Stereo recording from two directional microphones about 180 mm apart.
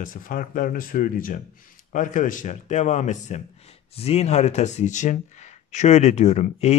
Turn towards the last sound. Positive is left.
turn(degrees=40)  # may be behind; listen again after turning